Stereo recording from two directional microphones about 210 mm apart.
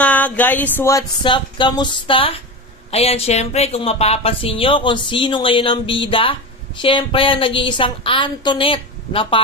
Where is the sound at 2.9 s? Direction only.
30° left (ahead or behind).